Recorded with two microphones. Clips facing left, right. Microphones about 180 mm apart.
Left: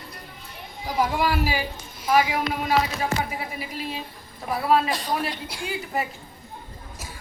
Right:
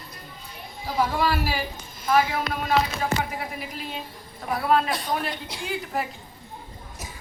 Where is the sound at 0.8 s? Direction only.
15° left (ahead or behind).